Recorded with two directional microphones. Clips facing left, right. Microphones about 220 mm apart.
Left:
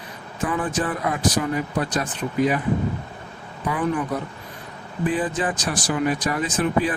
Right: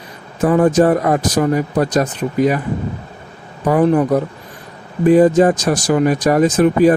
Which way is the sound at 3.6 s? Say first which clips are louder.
Right 11 dB; 40° right (ahead or behind).